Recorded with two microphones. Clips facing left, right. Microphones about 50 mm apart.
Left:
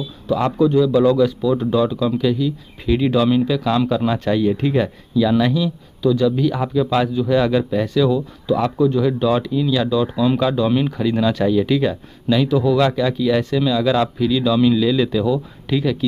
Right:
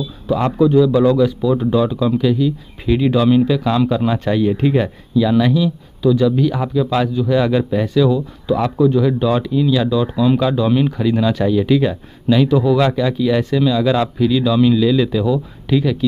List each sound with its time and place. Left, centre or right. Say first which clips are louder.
0.5 s a man's voice: right 3 dB; centre